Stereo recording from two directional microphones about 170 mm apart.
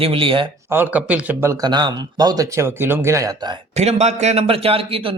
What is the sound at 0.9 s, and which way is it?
Speech, 5° right (ahead or behind).